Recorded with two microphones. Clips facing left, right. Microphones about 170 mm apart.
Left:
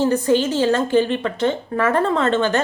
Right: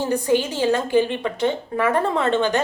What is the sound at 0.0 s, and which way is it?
A woman's voice, 10° right (ahead or behind).